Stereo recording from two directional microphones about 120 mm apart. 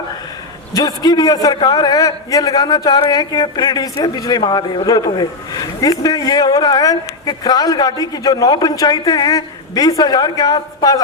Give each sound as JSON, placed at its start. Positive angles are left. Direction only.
{"t": 0.7, "sound": "a man's voice", "side_deg": 30}